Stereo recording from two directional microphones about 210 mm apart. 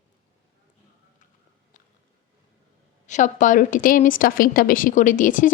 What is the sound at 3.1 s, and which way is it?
A woman's voice, 35° left (ahead or behind).